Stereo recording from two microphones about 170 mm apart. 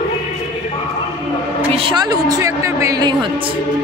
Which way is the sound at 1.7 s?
30° right (ahead or behind).